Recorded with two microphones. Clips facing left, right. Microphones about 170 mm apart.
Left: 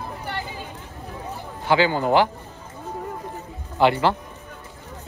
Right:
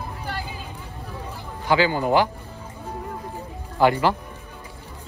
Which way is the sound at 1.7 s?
20° left (ahead or behind).